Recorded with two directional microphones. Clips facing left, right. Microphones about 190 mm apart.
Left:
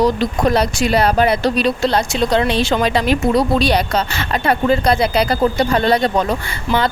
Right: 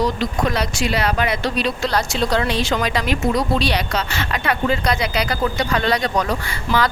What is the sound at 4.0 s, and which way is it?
Speech, 35° left (ahead or behind).